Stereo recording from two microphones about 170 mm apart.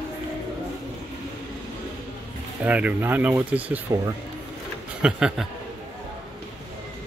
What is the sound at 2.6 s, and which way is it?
Speech, 10° right (ahead or behind).